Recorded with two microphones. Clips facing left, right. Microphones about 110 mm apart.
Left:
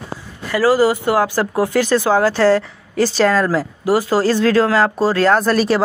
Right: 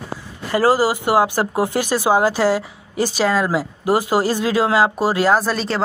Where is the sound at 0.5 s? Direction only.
25° right (ahead or behind).